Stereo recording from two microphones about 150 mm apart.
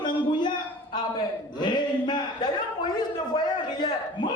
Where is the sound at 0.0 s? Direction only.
30° left (ahead or behind).